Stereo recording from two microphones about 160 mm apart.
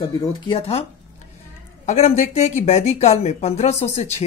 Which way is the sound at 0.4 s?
35° left (ahead or behind).